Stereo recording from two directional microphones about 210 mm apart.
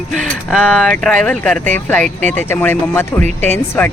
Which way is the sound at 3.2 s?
30° right (ahead or behind).